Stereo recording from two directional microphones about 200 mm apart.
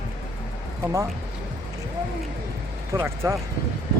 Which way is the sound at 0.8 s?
15° right (ahead or behind).